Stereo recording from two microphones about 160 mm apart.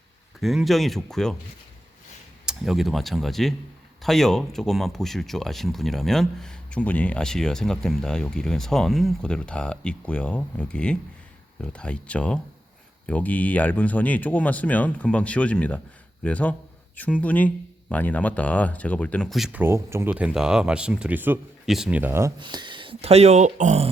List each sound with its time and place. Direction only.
0.3 s speech: centre (ahead or behind)
2.5 s a man's voice: centre (ahead or behind)
19.5 s speech: 15° right (ahead or behind)
22.4 s speech: 30° right (ahead or behind); by 23.9 s 45° right (ahead or behind)